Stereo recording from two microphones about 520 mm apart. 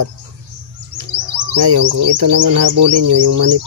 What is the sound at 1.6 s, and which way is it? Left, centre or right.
Bird, right.